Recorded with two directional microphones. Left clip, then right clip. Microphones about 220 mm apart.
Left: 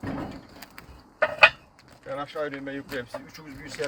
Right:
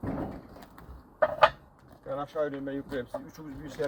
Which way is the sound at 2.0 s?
10° left (ahead or behind).